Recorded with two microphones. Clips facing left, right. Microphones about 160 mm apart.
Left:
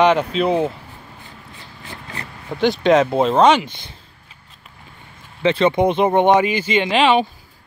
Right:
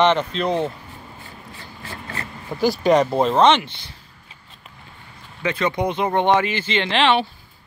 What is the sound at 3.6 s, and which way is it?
Speech, 50° left (ahead or behind).